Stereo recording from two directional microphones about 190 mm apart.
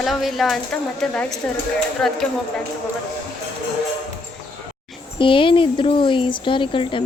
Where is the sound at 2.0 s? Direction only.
Centre (ahead or behind).